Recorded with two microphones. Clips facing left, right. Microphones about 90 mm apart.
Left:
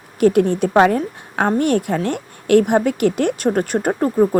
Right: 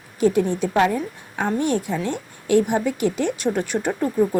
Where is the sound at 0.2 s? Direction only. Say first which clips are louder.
Left 5 dB; 60° left (ahead or behind).